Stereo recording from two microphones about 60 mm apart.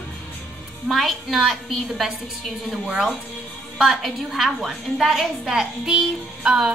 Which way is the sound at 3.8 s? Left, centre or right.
Centre.